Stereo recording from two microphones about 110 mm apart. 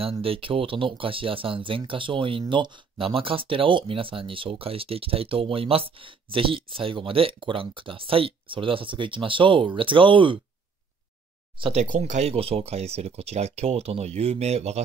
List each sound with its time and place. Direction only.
0.0 s speech: 55° right (ahead or behind)
11.7 s speech: 90° right